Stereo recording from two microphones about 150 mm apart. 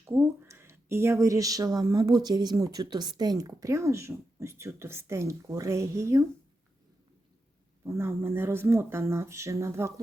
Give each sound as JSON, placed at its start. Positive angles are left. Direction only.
{"t": 0.0, "sound": "speech", "side_deg": -15}
{"t": 7.9, "sound": "speech", "side_deg": -15}